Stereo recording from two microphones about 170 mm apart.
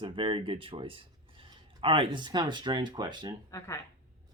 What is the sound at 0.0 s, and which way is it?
Speech, 30° right (ahead or behind).